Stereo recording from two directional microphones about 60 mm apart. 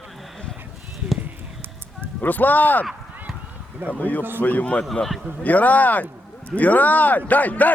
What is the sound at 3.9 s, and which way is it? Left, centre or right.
Speech, left.